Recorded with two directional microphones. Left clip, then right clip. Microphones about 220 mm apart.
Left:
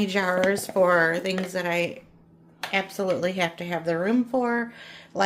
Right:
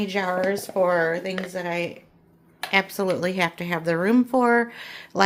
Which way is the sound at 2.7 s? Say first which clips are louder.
Right 3 dB; 20° right (ahead or behind).